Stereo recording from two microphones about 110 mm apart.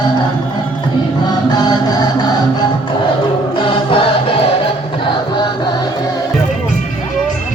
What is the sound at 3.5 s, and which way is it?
Music, 55° left (ahead or behind).